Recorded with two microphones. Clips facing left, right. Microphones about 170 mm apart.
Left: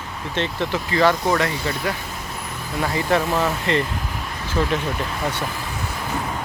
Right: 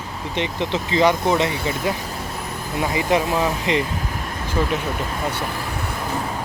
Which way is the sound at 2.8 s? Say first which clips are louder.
Right 1 dB; 15° right (ahead or behind).